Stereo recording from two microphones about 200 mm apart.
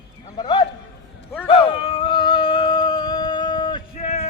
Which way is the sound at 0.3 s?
25° left (ahead or behind).